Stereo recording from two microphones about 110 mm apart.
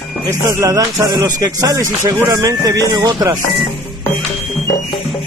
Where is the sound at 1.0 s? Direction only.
35° right (ahead or behind).